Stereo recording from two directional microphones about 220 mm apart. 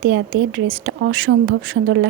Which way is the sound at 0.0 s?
65° right (ahead or behind).